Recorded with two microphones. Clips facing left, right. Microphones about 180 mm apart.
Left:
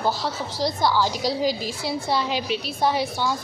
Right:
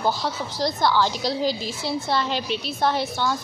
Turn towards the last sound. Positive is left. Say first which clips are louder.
# even
turn(degrees=10)  # may be behind; listen again after turning